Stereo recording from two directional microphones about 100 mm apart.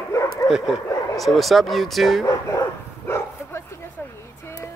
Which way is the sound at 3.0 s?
25° left (ahead or behind).